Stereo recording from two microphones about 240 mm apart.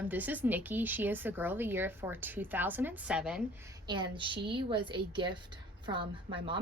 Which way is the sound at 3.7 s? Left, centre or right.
Centre.